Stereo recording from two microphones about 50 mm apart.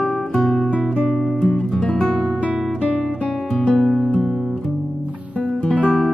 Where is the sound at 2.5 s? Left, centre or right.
Centre.